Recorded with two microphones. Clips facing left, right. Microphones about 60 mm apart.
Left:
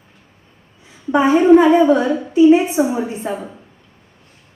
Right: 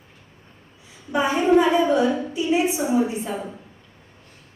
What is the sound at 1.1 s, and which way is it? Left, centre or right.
A woman's voice, left.